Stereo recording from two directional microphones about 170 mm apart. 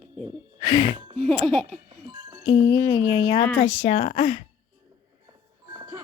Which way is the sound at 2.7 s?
20° left (ahead or behind).